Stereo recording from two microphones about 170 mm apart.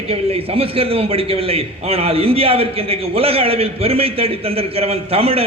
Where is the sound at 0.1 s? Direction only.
35° right (ahead or behind).